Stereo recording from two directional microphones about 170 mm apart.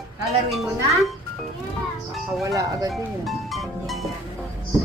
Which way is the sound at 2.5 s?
20° right (ahead or behind).